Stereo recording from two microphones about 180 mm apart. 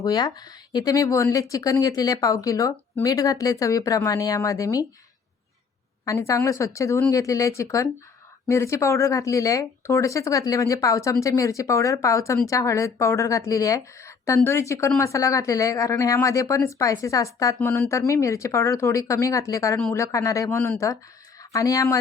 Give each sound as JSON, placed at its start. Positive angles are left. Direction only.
{"t": 0.0, "sound": "speech", "side_deg": 20}
{"t": 6.1, "sound": "speech", "side_deg": 15}